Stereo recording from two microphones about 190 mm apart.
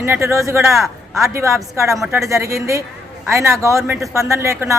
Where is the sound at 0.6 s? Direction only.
Centre (ahead or behind).